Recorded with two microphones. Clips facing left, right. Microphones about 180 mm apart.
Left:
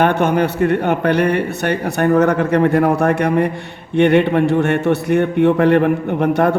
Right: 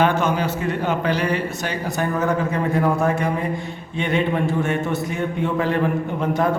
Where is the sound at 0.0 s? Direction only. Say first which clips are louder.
Left 5 dB; 65° left (ahead or behind).